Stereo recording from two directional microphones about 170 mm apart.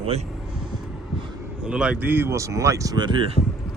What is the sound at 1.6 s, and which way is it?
Speech, 5° right (ahead or behind).